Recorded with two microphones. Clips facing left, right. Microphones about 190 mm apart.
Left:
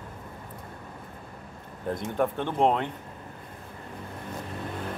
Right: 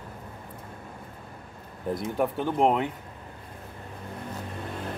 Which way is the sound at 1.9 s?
5° right (ahead or behind).